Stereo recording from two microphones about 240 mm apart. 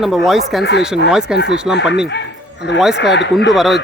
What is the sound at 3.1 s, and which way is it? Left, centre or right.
Speech, left.